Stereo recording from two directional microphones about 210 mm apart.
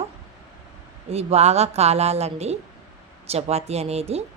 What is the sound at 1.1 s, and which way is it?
A woman's voice, 30° right (ahead or behind).